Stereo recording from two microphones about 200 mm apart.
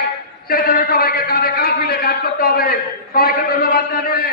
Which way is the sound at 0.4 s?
50° left (ahead or behind).